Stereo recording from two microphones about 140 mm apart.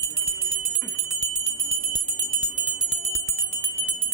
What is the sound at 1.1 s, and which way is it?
Bell, 55° right (ahead or behind).